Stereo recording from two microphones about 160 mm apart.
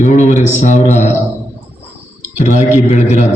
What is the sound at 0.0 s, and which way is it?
A man's voice, 50° left (ahead or behind).